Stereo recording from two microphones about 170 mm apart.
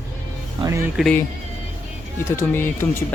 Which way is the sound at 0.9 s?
5° left (ahead or behind).